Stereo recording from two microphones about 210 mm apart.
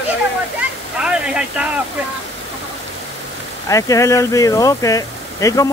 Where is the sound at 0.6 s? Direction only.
5° right (ahead or behind).